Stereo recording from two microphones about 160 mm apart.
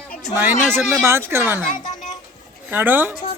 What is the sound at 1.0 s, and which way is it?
Speech, 15° right (ahead or behind).